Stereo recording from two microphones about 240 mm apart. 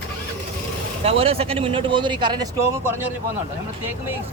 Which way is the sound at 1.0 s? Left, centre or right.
Right.